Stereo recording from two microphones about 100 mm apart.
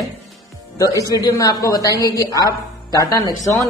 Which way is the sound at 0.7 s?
35° left (ahead or behind).